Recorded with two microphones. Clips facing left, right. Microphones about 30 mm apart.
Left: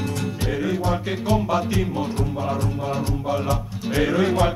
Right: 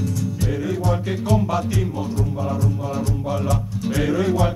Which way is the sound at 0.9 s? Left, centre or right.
Left.